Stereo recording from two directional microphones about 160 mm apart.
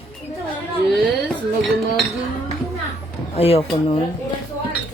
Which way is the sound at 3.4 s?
35° left (ahead or behind).